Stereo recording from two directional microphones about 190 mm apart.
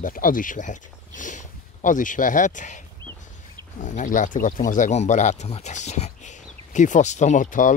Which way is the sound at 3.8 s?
40° left (ahead or behind).